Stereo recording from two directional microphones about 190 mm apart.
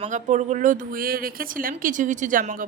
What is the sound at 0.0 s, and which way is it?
A woman's voice, 40° right (ahead or behind).